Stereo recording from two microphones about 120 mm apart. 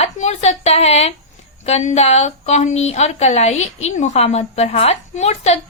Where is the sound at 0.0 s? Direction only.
65° left (ahead or behind).